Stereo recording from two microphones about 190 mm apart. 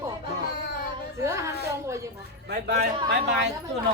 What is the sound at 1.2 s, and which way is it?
Speech, 15° right (ahead or behind).